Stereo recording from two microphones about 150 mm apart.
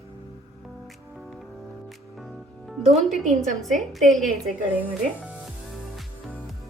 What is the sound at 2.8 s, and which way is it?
Speech, 50° right (ahead or behind).